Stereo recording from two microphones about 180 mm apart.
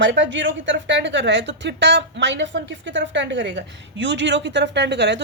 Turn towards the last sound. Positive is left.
turn(degrees=-70)  # may be behind; listen again after turning